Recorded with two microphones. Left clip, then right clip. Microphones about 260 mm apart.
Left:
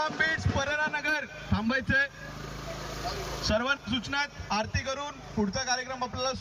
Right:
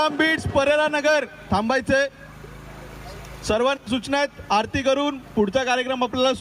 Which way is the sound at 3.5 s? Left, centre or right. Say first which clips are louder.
Right 7 dB; right.